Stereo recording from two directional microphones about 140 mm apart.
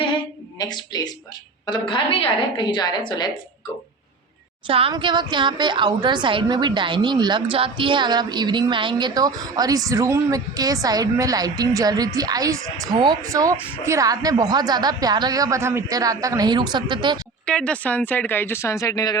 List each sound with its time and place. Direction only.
0.6 s a woman's voice: 30° left (ahead or behind)
4.6 s a woman's voice: 40° right (ahead or behind)
17.4 s speech: 5° left (ahead or behind); by 19.1 s 25° left (ahead or behind)